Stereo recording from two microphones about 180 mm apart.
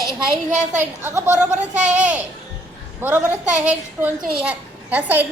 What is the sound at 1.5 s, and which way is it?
Speech, 40° right (ahead or behind).